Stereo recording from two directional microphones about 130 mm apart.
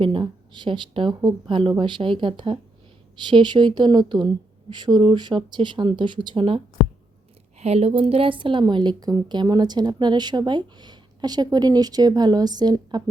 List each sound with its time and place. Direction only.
0.0 s a woman's voice: 40° right (ahead or behind)
7.6 s a woman's voice: 50° right (ahead or behind); by 13.0 s 30° right (ahead or behind)